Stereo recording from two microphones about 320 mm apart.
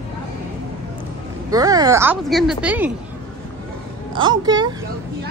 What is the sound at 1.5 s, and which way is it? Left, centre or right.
Speech, centre.